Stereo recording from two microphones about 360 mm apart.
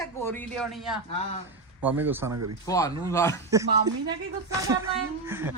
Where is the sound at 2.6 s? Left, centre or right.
Centre.